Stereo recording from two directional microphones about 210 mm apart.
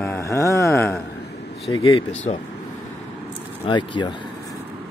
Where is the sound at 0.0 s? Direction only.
10° left (ahead or behind).